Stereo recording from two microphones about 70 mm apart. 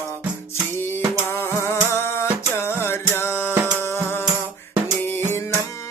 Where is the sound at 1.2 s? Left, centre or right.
Left.